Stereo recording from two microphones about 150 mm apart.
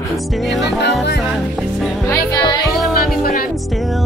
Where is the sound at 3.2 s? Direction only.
75° left (ahead or behind).